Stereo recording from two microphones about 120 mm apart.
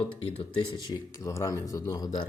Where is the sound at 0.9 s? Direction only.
30° left (ahead or behind).